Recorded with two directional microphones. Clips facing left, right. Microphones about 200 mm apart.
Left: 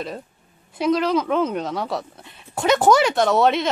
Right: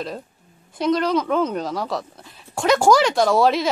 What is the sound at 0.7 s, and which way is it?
Speech, 5° left (ahead or behind).